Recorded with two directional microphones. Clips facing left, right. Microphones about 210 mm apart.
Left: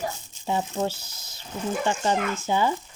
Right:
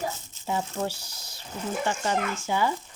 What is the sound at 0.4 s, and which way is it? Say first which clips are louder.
Speech: left 3 dB; 25° left (ahead or behind).